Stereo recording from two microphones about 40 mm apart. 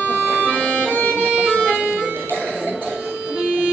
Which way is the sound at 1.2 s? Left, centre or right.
Right.